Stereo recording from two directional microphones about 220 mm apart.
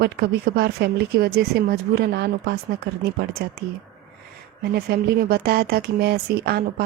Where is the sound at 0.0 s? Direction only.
45° right (ahead or behind).